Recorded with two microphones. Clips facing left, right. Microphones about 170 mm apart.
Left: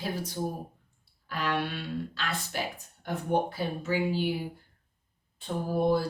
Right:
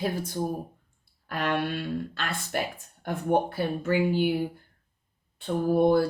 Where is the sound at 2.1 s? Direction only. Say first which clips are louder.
Right 3 dB; 50° right (ahead or behind).